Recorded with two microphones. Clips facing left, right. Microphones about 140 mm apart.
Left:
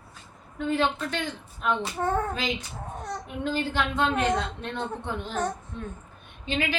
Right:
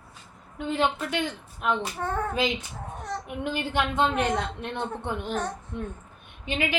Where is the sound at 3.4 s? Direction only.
15° right (ahead or behind).